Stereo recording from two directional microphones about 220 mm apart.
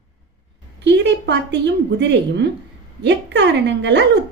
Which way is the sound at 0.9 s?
55° right (ahead or behind).